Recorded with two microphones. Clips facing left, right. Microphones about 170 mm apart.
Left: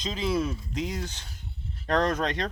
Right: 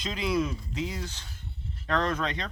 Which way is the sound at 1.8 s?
40° left (ahead or behind).